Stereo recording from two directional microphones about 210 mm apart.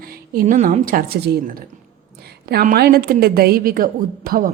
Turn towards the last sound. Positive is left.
turn(degrees=-45)  # may be behind; listen again after turning